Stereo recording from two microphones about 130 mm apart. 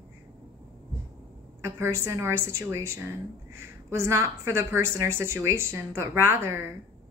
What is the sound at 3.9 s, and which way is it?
A woman's voice, 20° right (ahead or behind).